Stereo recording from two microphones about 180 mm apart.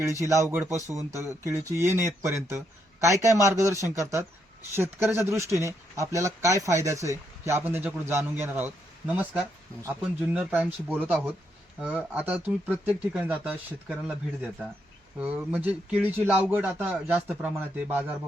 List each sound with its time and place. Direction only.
0.0 s speech: 15° right (ahead or behind)
15.2 s speech: 10° right (ahead or behind)